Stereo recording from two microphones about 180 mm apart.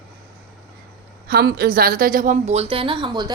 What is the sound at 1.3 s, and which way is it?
A woman's voice, 60° right (ahead or behind).